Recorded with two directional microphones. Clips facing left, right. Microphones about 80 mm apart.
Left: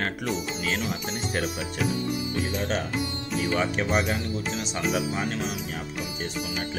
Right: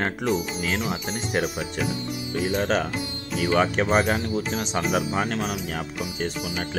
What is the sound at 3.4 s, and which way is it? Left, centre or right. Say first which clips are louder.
Speech: right 5 dB; right.